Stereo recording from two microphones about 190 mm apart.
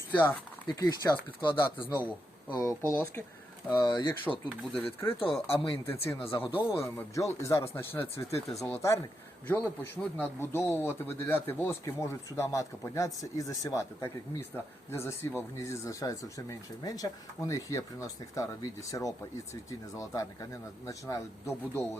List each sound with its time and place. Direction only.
0.1 s speech: 10° left (ahead or behind)
4.4 s speech: 5° left (ahead or behind)
6.4 s speech: 30° left (ahead or behind)
6.7 s speech: 15° left (ahead or behind)